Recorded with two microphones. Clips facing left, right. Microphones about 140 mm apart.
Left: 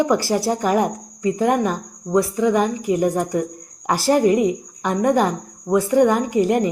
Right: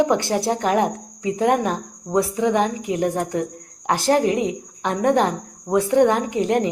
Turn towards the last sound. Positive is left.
turn(degrees=5)  # may be behind; listen again after turning